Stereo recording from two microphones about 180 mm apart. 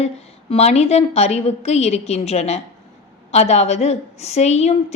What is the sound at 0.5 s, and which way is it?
A woman's voice, 35° left (ahead or behind).